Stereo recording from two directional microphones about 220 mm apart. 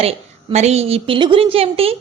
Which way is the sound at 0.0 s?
30° right (ahead or behind).